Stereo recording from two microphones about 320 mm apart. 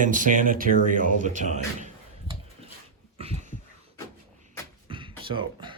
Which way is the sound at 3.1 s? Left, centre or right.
Centre.